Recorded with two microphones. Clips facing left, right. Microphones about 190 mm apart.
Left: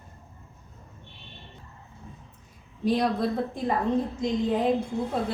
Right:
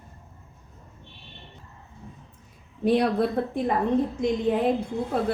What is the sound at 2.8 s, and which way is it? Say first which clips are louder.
Speech: right 3 dB; 60° right (ahead or behind).